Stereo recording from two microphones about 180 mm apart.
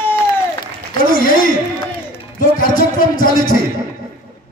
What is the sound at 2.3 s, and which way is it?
A man's voice, 50° left (ahead or behind).